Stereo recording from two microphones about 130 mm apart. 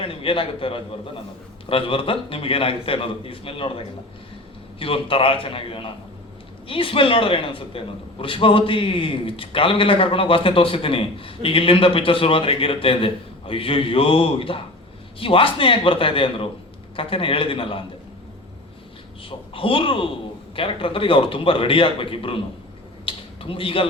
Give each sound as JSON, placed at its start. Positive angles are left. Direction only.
{"t": 0.0, "sound": "a man's voice", "side_deg": 45}
{"t": 19.5, "sound": "a man's voice", "side_deg": 40}
{"t": 23.0, "sound": "a sound", "side_deg": 45}